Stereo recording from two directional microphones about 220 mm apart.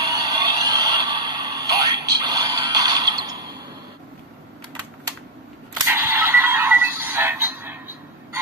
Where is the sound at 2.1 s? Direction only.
20° right (ahead or behind).